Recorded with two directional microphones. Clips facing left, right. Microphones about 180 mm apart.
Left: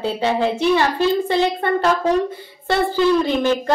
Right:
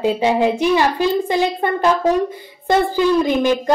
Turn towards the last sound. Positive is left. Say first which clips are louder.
# right 2 dB
turn(degrees=-15)  # may be behind; listen again after turning